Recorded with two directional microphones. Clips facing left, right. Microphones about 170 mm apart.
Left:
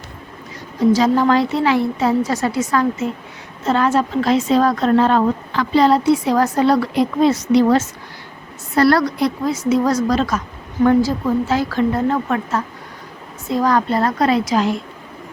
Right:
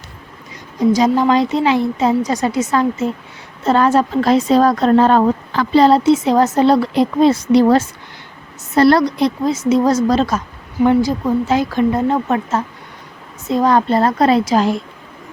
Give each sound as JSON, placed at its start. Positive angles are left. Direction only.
{"t": 0.8, "sound": "a woman's voice", "side_deg": -15}
{"t": 3.7, "sound": "a woman's voice", "side_deg": -35}
{"t": 8.7, "sound": "a woman's voice", "side_deg": -20}
{"t": 10.8, "sound": "a woman's voice", "side_deg": -15}